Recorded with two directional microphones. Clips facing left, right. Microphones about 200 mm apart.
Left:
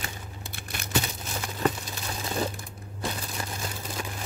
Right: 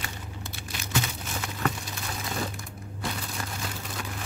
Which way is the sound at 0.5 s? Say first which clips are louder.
Left 3 dB; 55° left (ahead or behind).